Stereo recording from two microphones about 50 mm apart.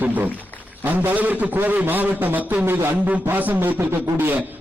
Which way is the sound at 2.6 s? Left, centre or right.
Right.